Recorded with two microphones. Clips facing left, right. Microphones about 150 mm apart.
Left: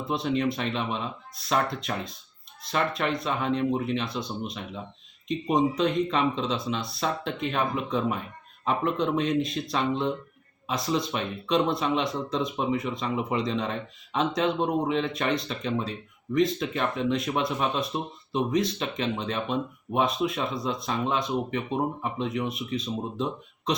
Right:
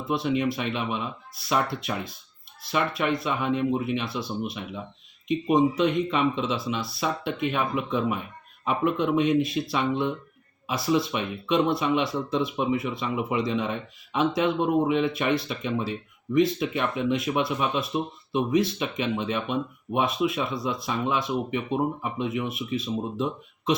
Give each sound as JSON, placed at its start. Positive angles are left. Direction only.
{"t": 0.0, "sound": "speech", "side_deg": -5}